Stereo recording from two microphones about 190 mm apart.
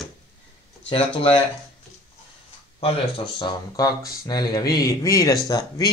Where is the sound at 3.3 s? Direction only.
20° left (ahead or behind).